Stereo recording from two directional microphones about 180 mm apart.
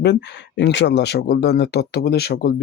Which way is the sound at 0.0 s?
70° left (ahead or behind).